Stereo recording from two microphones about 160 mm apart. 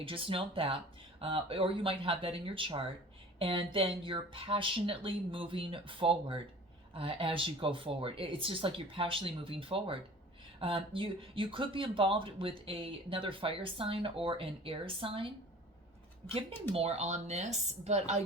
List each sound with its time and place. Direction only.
0.0 s speech: 35° right (ahead or behind)
16.7 s speech: 40° right (ahead or behind)